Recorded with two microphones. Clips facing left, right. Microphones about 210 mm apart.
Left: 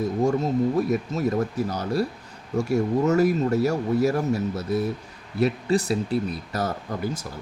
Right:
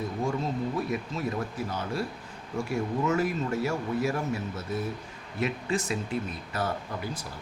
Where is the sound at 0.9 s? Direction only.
40° left (ahead or behind).